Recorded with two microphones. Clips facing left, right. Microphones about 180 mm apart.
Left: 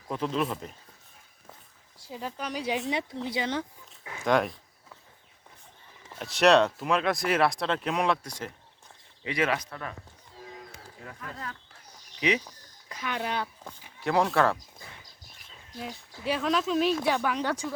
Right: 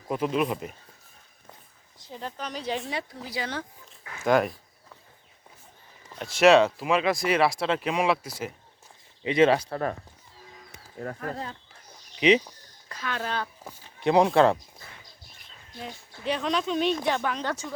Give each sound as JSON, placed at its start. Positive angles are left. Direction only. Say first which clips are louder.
{"t": 0.1, "sound": "speech", "louder": "right 3 dB", "side_deg": -10}
{"t": 2.0, "sound": "speech", "louder": "left 1 dB", "side_deg": 5}
{"t": 3.2, "sound": "speech", "louder": "left 3 dB", "side_deg": 20}
{"t": 4.2, "sound": "a sound", "louder": "right 2 dB", "side_deg": -5}
{"t": 6.1, "sound": "speech", "louder": "right 3 dB", "side_deg": 0}
{"t": 9.2, "sound": "speech", "louder": "right 8 dB", "side_deg": -25}
{"t": 11.0, "sound": "speech", "louder": "right 10 dB", "side_deg": -50}
{"t": 12.2, "sound": "speech", "louder": "right 7 dB", "side_deg": -20}
{"t": 12.9, "sound": "speech", "louder": "even", "side_deg": 15}
{"t": 14.0, "sound": "speech", "louder": "right 5 dB", "side_deg": -20}
{"t": 15.8, "sound": "speech", "louder": "even", "side_deg": 0}